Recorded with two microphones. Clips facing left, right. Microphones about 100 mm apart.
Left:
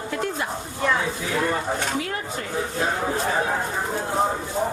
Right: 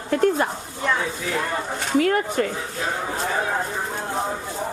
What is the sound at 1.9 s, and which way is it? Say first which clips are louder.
Dishes: right 9 dB; 60° right (ahead or behind).